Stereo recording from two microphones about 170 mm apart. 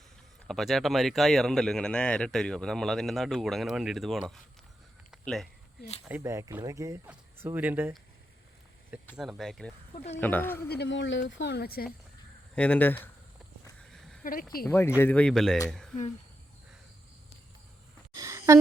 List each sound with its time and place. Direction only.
0.4 s speech: centre (ahead or behind)
6.1 s speech: 15° right (ahead or behind)
8.9 s a sound: 10° right (ahead or behind)
9.4 s speech: centre (ahead or behind)
9.9 s speech: 40° left (ahead or behind)
10.2 s speech: 10° left (ahead or behind)
10.7 s speech: 85° left; by 11.9 s 65° left (ahead or behind)
12.5 s speech: 10° left (ahead or behind)
13.8 s a sound: 5° left (ahead or behind)
14.6 s speech: 10° left (ahead or behind)
18.1 s a sound: 20° right (ahead or behind)